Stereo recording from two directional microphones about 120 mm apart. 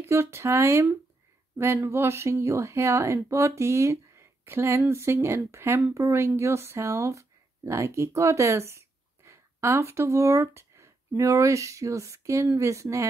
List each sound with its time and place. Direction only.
0.0 s speech: 20° right (ahead or behind)